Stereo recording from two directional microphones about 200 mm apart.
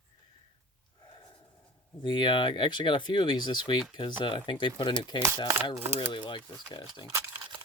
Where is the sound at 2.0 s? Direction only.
25° left (ahead or behind).